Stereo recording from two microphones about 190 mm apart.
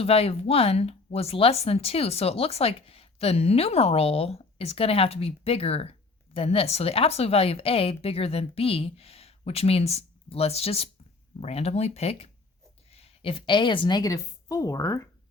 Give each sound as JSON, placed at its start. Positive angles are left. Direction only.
{"t": 0.0, "sound": "a woman's voice", "side_deg": 30}